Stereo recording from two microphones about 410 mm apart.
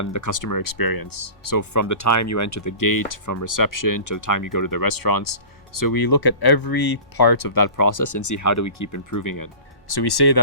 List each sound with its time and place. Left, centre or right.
0.0 s speech: left
9.9 s speech: left